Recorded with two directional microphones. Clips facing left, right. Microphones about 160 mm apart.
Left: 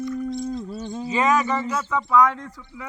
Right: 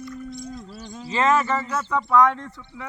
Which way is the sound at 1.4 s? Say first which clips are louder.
Left 1 dB; 10° left (ahead or behind).